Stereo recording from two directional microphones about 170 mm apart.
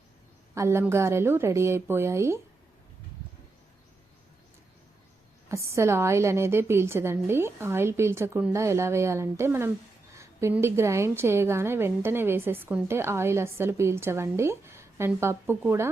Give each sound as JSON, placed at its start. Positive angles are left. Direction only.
{"t": 0.5, "sound": "a woman's voice", "side_deg": -15}
{"t": 5.5, "sound": "a woman's voice", "side_deg": -15}